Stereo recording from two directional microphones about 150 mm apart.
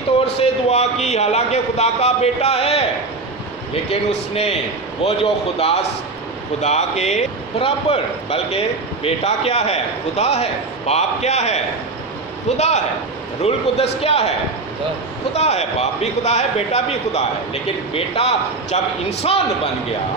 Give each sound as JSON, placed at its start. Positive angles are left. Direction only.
{"t": 0.4, "sound": "a man's voice", "side_deg": 45}
{"t": 3.9, "sound": "a man's voice", "side_deg": 45}
{"t": 15.3, "sound": "a man's voice", "side_deg": 45}